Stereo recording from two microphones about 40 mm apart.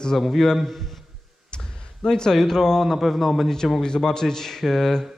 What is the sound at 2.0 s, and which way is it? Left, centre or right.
Speech, centre.